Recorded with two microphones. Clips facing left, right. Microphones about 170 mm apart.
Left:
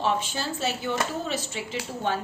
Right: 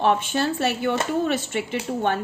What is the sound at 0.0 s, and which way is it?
A woman's voice, 60° right (ahead or behind).